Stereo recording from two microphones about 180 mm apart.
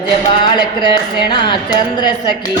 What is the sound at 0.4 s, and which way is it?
Mantra, 25° left (ahead or behind).